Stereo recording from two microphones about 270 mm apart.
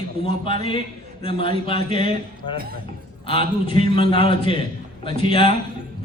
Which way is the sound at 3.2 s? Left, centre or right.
Centre.